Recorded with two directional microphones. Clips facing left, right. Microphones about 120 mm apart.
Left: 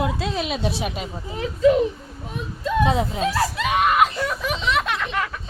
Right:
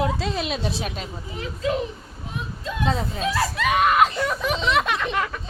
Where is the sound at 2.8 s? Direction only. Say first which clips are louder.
Left 4 dB; 15° left (ahead or behind).